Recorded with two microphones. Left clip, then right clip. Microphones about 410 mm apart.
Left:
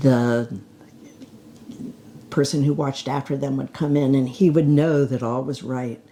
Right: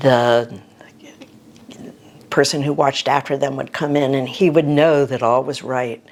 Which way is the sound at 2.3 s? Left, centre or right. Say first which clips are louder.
Right 5 dB; right.